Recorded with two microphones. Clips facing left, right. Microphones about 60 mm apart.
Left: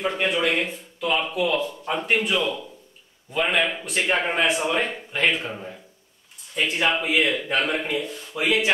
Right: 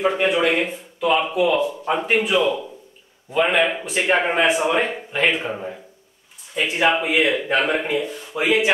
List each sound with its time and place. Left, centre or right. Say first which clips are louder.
0.0 s a man's voice: right 5 dB; centre